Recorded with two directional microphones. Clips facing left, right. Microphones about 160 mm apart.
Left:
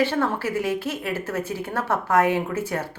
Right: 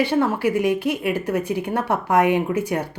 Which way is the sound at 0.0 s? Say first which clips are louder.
Right 3 dB; 15° right (ahead or behind).